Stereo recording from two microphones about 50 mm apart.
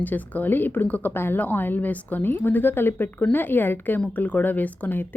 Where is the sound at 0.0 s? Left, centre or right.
Left.